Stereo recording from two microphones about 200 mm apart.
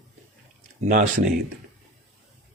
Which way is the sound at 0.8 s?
40° right (ahead or behind).